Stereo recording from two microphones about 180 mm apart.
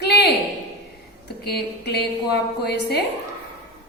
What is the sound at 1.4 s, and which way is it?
A woman's voice, 65° left (ahead or behind).